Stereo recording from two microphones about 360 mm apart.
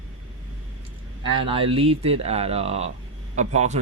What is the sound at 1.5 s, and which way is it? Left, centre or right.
Speech, centre.